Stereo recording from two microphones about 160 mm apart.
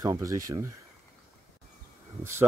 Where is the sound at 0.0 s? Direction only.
20° right (ahead or behind).